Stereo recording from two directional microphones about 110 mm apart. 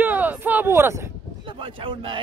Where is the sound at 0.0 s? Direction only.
15° right (ahead or behind).